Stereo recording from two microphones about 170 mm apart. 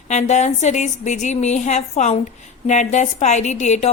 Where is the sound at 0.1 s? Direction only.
45° left (ahead or behind).